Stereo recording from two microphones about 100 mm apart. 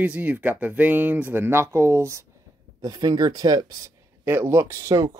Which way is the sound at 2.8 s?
45° right (ahead or behind).